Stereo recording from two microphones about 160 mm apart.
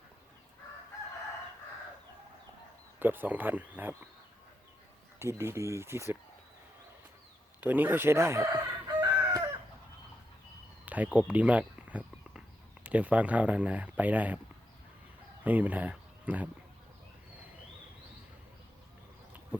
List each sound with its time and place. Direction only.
3.0 s speech: 10° right (ahead or behind)
5.2 s speech: 15° right (ahead or behind)
7.6 s speech: 10° right (ahead or behind)
10.8 s walk: 10° right (ahead or behind)
12.8 s speech: 10° right (ahead or behind)
15.4 s speech: 10° right (ahead or behind)